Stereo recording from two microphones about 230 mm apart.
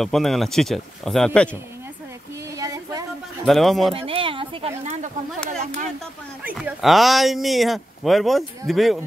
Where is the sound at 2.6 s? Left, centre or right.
Centre.